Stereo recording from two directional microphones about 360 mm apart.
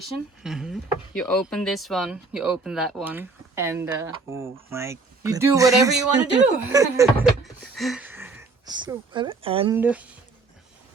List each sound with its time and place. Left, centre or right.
0.4 s speech: centre